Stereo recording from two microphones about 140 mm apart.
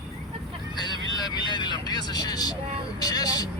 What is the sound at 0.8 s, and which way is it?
Speech, 30° left (ahead or behind).